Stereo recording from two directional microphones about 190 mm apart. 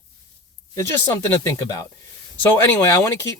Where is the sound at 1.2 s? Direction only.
15° left (ahead or behind).